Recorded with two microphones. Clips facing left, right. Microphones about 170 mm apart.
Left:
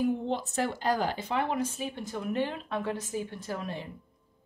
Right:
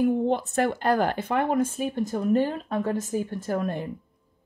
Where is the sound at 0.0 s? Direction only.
55° right (ahead or behind).